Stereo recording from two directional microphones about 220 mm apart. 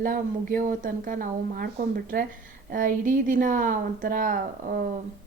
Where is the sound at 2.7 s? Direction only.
35° right (ahead or behind).